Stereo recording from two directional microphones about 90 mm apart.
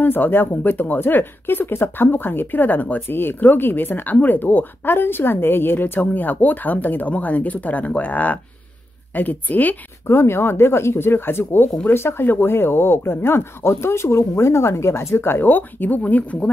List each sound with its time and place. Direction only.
0.0 s speech: 20° left (ahead or behind)